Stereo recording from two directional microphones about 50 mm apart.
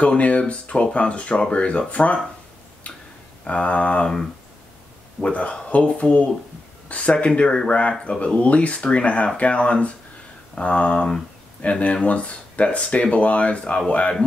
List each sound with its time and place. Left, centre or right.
0.0 s speech: left
3.4 s speech: left
5.2 s speech: left